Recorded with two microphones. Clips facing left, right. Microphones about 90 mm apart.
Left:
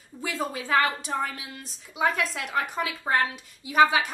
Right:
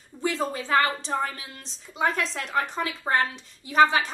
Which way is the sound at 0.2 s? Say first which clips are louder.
Right 3 dB; 5° left (ahead or behind).